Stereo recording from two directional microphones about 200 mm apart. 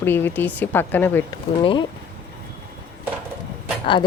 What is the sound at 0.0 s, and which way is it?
Speech, 10° left (ahead or behind).